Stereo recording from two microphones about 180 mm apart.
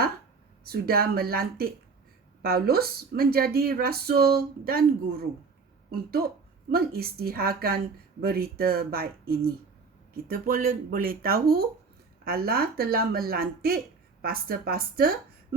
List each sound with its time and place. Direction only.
0.6 s speech: 55° right (ahead or behind)